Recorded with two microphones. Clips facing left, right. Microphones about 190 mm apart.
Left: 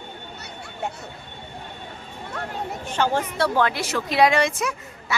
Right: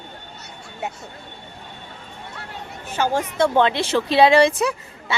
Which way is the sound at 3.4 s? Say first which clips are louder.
Right 5 dB; 25° right (ahead or behind).